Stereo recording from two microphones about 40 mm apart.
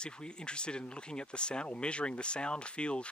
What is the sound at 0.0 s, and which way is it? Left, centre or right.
Speech, left.